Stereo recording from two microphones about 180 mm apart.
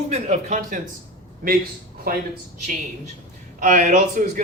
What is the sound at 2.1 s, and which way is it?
Speech, 55° right (ahead or behind).